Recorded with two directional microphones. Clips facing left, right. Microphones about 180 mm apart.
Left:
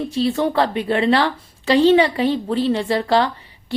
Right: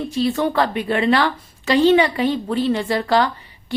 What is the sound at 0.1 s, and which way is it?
A woman's voice, 30° left (ahead or behind).